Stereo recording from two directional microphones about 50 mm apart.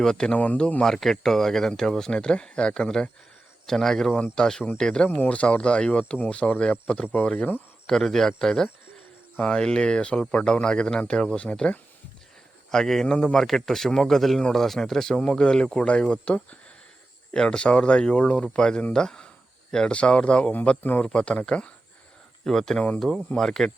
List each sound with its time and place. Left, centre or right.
0.0 s speech: centre
5.0 s speech: left
5.3 s speech: left
7.9 s speech: centre
12.7 s speech: centre
22.4 s speech: centre